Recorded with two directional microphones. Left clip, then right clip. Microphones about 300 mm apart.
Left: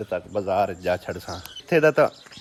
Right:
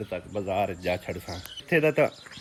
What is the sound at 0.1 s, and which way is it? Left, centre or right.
Speech, centre.